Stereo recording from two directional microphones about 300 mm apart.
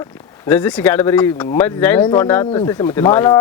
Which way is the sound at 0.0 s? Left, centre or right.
Centre.